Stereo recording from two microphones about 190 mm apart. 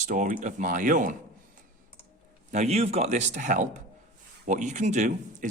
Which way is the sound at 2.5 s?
35° right (ahead or behind).